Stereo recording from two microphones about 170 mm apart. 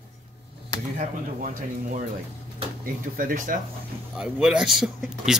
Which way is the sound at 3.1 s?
55° right (ahead or behind).